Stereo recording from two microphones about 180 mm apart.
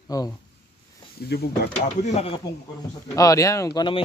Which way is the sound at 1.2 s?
65° left (ahead or behind).